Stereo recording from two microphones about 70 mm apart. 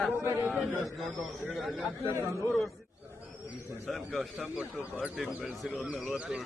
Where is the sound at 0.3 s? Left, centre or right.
Right.